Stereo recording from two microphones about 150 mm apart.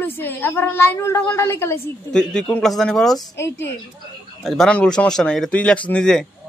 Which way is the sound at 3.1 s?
20° left (ahead or behind).